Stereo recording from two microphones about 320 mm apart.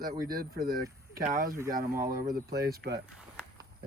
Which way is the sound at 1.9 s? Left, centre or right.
Centre.